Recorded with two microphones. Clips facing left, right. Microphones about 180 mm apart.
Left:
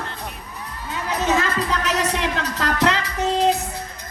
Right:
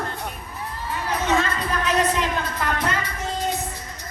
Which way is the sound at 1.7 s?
85° left.